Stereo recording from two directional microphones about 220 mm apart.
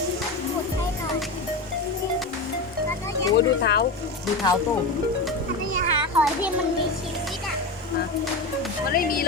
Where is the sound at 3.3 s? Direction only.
50° left (ahead or behind).